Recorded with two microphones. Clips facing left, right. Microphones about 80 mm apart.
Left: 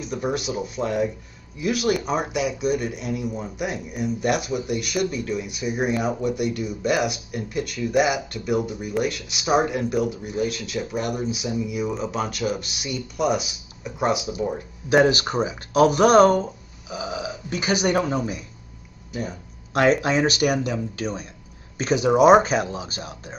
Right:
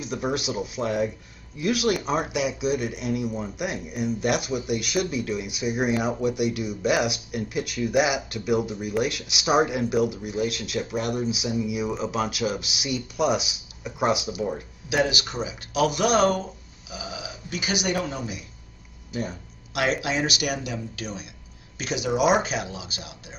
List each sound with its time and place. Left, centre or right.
0.0 s speech: centre
14.9 s speech: left
19.7 s speech: left